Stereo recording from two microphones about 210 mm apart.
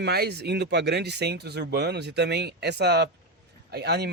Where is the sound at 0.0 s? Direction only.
50° right (ahead or behind).